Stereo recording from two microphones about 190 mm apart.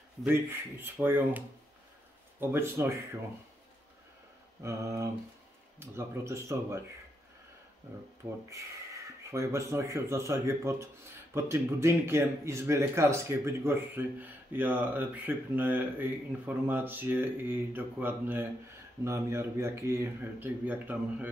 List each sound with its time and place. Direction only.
0.2 s speech: 10° right (ahead or behind)
2.4 s speech: 15° right (ahead or behind)
4.6 s speech: 15° right (ahead or behind)
9.3 s speech: 15° right (ahead or behind)